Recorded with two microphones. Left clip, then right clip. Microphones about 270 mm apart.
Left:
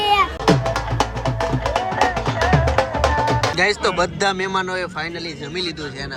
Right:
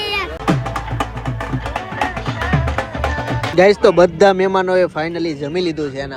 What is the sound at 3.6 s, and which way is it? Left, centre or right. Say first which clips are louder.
Speech: right 12 dB; centre.